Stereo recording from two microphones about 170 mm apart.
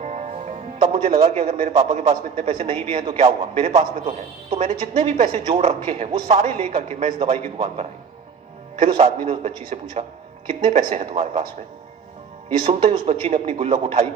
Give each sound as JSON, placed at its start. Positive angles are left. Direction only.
{"t": 0.0, "sound": "music", "side_deg": -40}
{"t": 1.3, "sound": "speech", "side_deg": -40}
{"t": 9.2, "sound": "speech", "side_deg": -40}
{"t": 12.5, "sound": "speech", "side_deg": -40}